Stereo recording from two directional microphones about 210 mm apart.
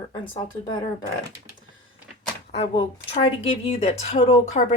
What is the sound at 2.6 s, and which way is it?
A woman's voice, 30° left (ahead or behind).